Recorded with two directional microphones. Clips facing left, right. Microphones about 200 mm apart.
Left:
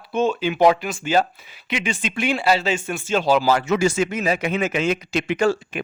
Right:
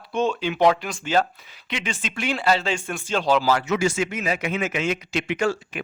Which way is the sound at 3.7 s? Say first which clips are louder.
Left 3 dB; 40° left (ahead or behind).